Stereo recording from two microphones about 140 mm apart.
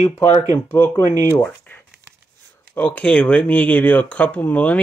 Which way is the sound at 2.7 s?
10° left (ahead or behind).